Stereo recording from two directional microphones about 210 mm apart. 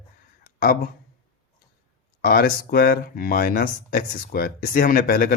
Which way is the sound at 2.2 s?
45° left (ahead or behind).